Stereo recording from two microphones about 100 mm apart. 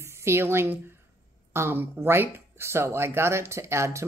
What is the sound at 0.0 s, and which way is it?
A woman's voice, 25° right (ahead or behind).